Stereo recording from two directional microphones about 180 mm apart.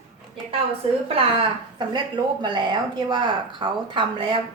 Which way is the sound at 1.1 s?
30° right (ahead or behind).